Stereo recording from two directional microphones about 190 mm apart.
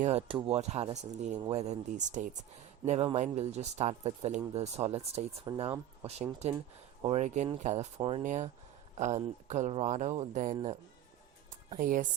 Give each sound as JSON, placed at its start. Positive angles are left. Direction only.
{"t": 0.0, "sound": "speech", "side_deg": -35}
{"t": 7.9, "sound": "speech", "side_deg": -30}
{"t": 8.2, "sound": "speech", "side_deg": -40}
{"t": 11.8, "sound": "speech", "side_deg": -45}